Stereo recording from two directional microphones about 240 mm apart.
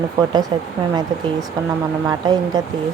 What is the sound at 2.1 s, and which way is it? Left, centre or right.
Speech, centre.